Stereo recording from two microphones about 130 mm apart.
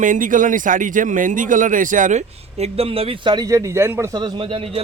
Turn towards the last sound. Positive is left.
turn(degrees=-45)  # may be behind; listen again after turning